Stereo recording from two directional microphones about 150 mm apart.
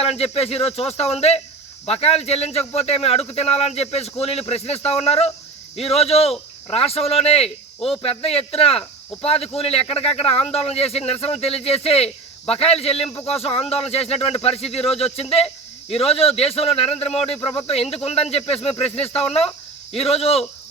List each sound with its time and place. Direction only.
0.2 s speech: 40° left (ahead or behind)